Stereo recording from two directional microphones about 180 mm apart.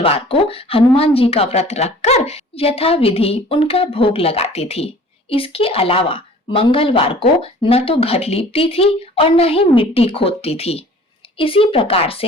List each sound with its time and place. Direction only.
0.0 s speech: 30° left (ahead or behind)